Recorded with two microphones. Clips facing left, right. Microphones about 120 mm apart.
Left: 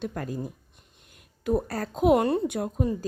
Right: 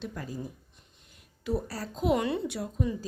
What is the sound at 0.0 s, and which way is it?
A woman's voice, 55° left (ahead or behind).